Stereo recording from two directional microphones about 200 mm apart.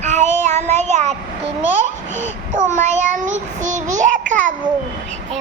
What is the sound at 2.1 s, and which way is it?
Child singing, 35° right (ahead or behind).